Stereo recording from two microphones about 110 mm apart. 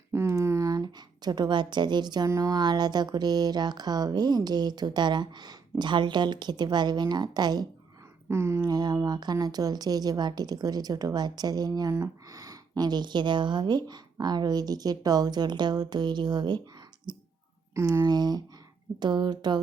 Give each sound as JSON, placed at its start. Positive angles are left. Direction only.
{"t": 0.1, "sound": "a woman's voice", "side_deg": -25}
{"t": 8.3, "sound": "speech", "side_deg": -25}
{"t": 8.6, "sound": "a woman's voice", "side_deg": -35}
{"t": 17.1, "sound": "clicking", "side_deg": -40}
{"t": 17.7, "sound": "speech", "side_deg": -25}
{"t": 18.0, "sound": "a woman's voice", "side_deg": -40}